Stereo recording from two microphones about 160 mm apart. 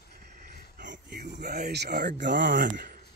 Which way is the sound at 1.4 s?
90° right.